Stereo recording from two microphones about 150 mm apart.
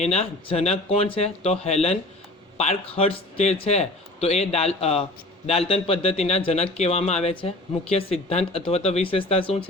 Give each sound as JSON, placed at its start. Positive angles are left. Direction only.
{"t": 0.0, "sound": "speech", "side_deg": 45}